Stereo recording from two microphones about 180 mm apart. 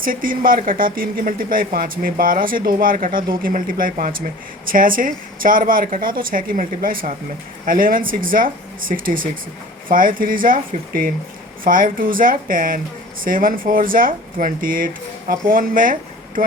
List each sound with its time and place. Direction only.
0.0 s speech: 50° right (ahead or behind)